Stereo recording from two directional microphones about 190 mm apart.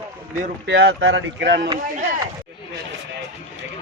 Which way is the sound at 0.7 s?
60° right (ahead or behind).